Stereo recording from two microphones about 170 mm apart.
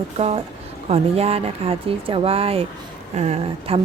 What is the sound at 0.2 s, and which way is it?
Speech, 35° right (ahead or behind).